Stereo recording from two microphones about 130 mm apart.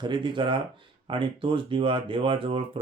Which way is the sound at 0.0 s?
40° right (ahead or behind).